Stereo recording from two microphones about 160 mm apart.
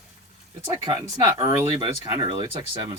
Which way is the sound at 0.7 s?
20° right (ahead or behind).